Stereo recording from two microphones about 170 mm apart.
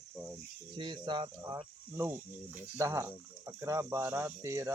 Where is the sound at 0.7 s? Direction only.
25° right (ahead or behind).